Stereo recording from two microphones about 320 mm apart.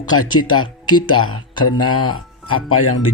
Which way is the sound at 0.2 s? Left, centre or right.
Left.